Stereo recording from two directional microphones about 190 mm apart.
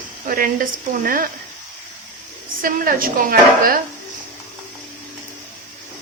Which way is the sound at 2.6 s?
50° right (ahead or behind).